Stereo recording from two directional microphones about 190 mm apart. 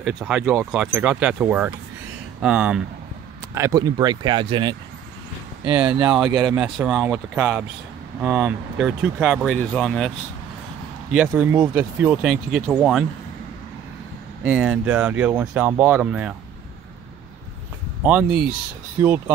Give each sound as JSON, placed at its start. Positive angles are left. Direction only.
{"t": 0.0, "sound": "speech", "side_deg": -5}
{"t": 3.5, "sound": "speech", "side_deg": -15}
{"t": 5.9, "sound": "speech", "side_deg": -5}
{"t": 6.3, "sound": "speech", "side_deg": -20}
{"t": 6.6, "sound": "speech", "side_deg": -5}
{"t": 14.4, "sound": "speech", "side_deg": -5}
{"t": 18.0, "sound": "speech", "side_deg": -5}